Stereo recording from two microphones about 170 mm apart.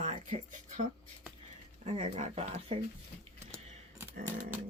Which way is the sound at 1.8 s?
40° right (ahead or behind).